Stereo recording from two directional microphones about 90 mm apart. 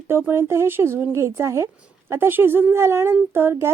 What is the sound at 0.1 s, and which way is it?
Speech, 25° right (ahead or behind).